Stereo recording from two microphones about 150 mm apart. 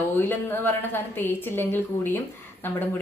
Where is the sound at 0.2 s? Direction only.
15° left (ahead or behind).